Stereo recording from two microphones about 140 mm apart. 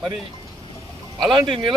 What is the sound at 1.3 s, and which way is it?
Speech, 35° right (ahead or behind).